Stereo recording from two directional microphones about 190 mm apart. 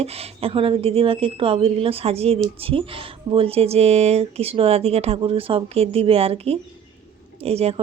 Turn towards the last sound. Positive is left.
turn(degrees=-35)  # may be behind; listen again after turning